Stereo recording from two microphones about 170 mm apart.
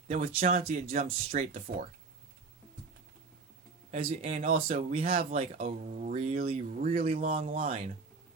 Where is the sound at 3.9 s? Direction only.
40° right (ahead or behind).